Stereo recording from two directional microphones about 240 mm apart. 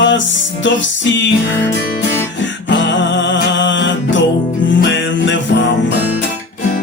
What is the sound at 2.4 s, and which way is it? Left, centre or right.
Music, left.